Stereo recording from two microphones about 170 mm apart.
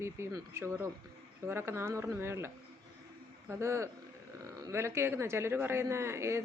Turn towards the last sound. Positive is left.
turn(degrees=-15)  # may be behind; listen again after turning